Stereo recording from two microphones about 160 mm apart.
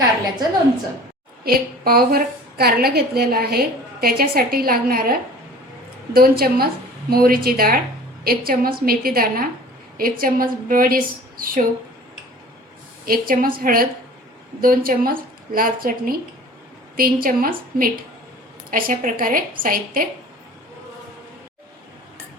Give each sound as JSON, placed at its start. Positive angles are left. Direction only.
{"t": 1.5, "sound": "a woman's voice", "side_deg": -70}
{"t": 6.1, "sound": "a woman's voice", "side_deg": -70}
{"t": 13.1, "sound": "a woman's voice", "side_deg": -65}